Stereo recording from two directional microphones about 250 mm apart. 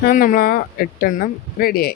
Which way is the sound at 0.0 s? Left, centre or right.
Left.